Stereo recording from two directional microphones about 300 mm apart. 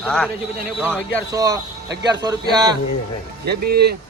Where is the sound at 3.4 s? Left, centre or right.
Right.